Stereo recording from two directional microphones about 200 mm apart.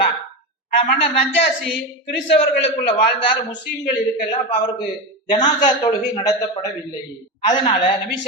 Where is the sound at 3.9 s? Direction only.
20° left (ahead or behind).